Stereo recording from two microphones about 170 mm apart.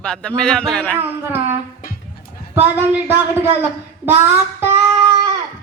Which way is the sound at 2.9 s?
10° right (ahead or behind).